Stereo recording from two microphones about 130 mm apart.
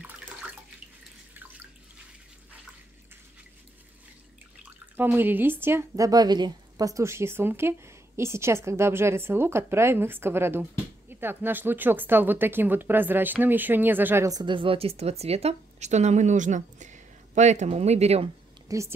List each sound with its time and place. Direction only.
4.6 s speech: 15° right (ahead or behind)
14.4 s speech: 40° right (ahead or behind)
18.7 s a woman's voice: 25° right (ahead or behind)